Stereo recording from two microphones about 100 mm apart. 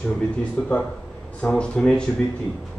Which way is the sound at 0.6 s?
20° left (ahead or behind).